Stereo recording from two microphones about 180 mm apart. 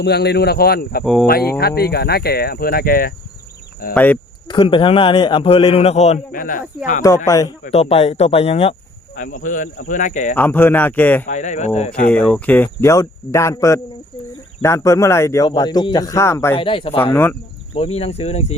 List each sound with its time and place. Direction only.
0.0 s speech: 65° left (ahead or behind)
1.0 s speech: centre (ahead or behind)
1.3 s speech: 60° left (ahead or behind)
3.9 s speech: 10° left (ahead or behind)
4.4 s a man's voice: 25° left (ahead or behind)
7.3 s a man's voice: 20° left (ahead or behind)
7.7 s speech: 35° left (ahead or behind)
9.1 s speech: 45° left (ahead or behind)
10.3 s speech: 10° left (ahead or behind)
11.3 s speech: 40° left (ahead or behind)
11.9 s speech: 5° left (ahead or behind)
16.6 s a man's voice: 30° left (ahead or behind)